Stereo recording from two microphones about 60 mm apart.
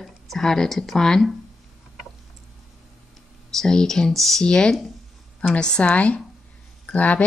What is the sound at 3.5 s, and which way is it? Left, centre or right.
Speech, centre.